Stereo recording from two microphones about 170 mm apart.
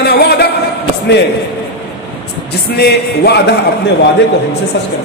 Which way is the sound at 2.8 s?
75° left (ahead or behind).